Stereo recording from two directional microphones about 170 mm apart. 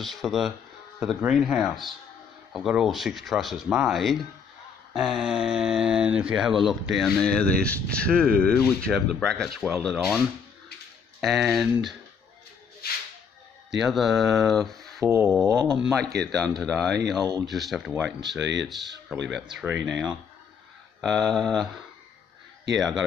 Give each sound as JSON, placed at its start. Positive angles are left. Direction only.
{"t": 0.0, "sound": "speech", "side_deg": 0}
{"t": 13.7, "sound": "speech", "side_deg": 0}
{"t": 15.0, "sound": "a sound", "side_deg": -15}
{"t": 15.4, "sound": "speech", "side_deg": -20}
{"t": 16.2, "sound": "speech", "side_deg": 5}
{"t": 17.2, "sound": "speech", "side_deg": -20}
{"t": 17.5, "sound": "speech", "side_deg": 0}
{"t": 18.4, "sound": "speech", "side_deg": -90}
{"t": 19.2, "sound": "speech", "side_deg": 0}